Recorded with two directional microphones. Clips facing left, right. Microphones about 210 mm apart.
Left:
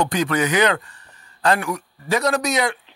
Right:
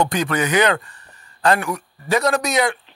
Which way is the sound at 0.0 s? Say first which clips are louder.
Even; 50° right (ahead or behind).